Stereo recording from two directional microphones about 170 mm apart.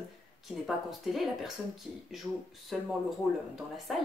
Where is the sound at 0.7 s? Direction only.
Centre (ahead or behind).